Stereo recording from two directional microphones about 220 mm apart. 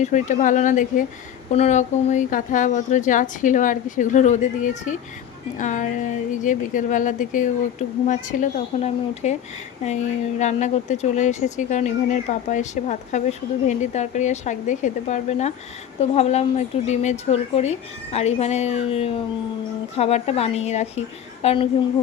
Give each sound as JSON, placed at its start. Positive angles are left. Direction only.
{"t": 0.0, "sound": "a woman's voice", "side_deg": 35}